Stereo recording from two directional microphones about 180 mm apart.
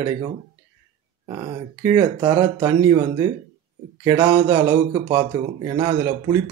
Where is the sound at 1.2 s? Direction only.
20° right (ahead or behind).